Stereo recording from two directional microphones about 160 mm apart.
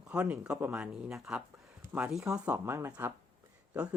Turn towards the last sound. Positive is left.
turn(degrees=-5)  # may be behind; listen again after turning